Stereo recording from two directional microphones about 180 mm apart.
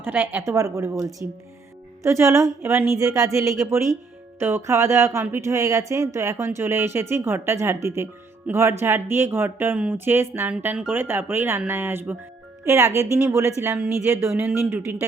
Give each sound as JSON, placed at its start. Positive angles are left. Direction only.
{"t": 0.0, "sound": "speech", "side_deg": -10}